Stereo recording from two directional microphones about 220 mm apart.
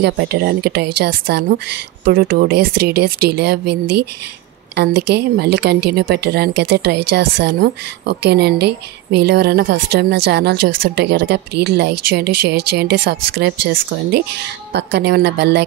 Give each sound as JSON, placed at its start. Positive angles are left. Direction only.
{"t": 0.0, "sound": "speech", "side_deg": -50}
{"t": 5.1, "sound": "speech", "side_deg": -50}
{"t": 14.7, "sound": "speech", "side_deg": -50}